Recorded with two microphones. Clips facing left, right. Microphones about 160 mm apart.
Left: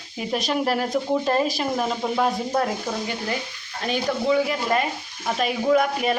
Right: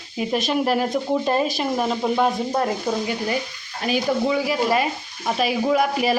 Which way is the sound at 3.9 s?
5° right (ahead or behind).